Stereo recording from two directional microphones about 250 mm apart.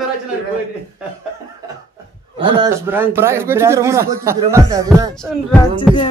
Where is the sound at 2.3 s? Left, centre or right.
Centre.